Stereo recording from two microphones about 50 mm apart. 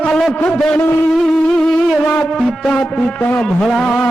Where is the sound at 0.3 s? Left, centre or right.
Left.